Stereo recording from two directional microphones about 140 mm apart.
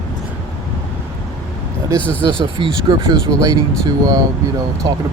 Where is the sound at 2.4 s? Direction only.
35° right (ahead or behind).